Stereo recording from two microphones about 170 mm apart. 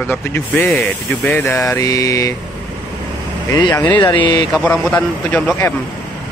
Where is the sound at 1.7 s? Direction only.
20° left (ahead or behind).